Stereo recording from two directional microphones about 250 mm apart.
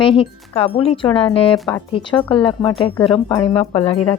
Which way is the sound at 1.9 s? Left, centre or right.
Centre.